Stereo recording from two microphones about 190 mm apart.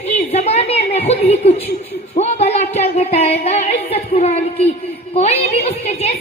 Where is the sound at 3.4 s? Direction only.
35° left (ahead or behind).